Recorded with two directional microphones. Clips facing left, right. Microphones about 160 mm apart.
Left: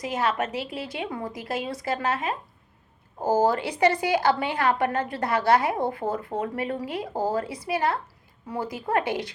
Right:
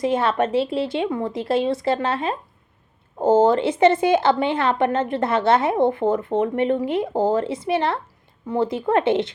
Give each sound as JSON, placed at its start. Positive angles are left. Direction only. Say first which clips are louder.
{"t": 0.0, "sound": "speech", "louder": "right 6 dB", "side_deg": -25}